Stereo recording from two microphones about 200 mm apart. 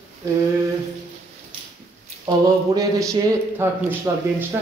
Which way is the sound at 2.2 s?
15° right (ahead or behind).